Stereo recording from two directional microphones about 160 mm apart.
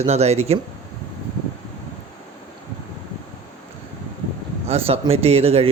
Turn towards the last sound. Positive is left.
turn(degrees=-40)  # may be behind; listen again after turning